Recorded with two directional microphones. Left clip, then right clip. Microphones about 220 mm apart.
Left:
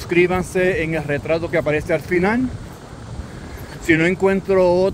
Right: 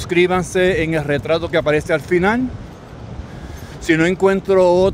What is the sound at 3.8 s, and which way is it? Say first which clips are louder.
Speech: right 1 dB; 25° right (ahead or behind).